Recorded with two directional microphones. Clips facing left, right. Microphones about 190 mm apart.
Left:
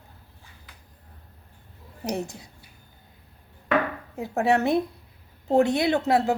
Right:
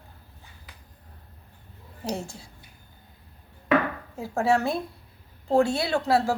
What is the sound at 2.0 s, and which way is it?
Speech, 20° left (ahead or behind).